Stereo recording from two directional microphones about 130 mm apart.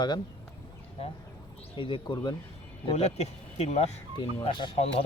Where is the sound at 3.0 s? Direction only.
55° left (ahead or behind).